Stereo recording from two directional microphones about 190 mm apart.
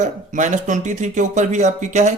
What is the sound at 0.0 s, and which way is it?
Speech, 40° right (ahead or behind).